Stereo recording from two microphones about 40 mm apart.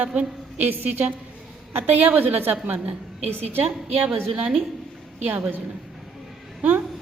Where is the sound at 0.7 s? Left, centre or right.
Right.